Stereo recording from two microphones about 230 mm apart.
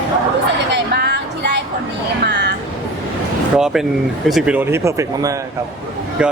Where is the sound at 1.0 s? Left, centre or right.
Right.